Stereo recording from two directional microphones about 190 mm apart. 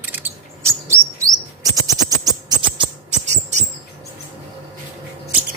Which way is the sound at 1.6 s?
20° right (ahead or behind).